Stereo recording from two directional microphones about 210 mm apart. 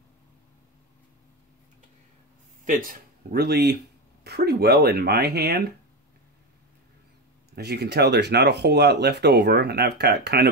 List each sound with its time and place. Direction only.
2.6 s speech: 40° right (ahead or behind)
7.5 s speech: 50° right (ahead or behind)